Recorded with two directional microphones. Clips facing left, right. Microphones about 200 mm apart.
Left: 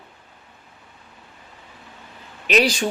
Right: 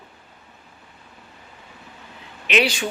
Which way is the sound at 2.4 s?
40° left (ahead or behind).